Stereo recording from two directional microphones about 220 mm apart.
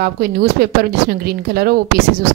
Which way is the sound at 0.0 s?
45° right (ahead or behind).